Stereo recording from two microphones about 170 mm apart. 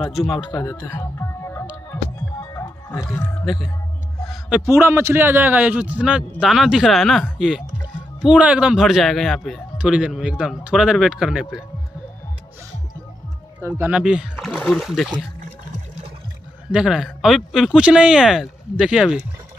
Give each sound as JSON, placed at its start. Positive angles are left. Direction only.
{"t": 0.4, "sound": "speech", "side_deg": 25}
{"t": 0.9, "sound": "music", "side_deg": 15}
{"t": 4.2, "sound": "a sound", "side_deg": 0}
{"t": 4.7, "sound": "a man's voice", "side_deg": -15}
{"t": 13.6, "sound": "a man's voice", "side_deg": -10}
{"t": 14.5, "sound": "a man's voice", "side_deg": 5}
{"t": 16.7, "sound": "a man's voice", "side_deg": -5}